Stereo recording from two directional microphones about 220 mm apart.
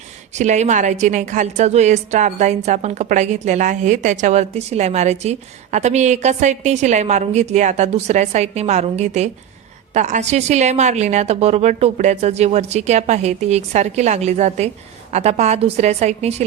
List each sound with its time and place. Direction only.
0.3 s a woman's voice: 30° right (ahead or behind)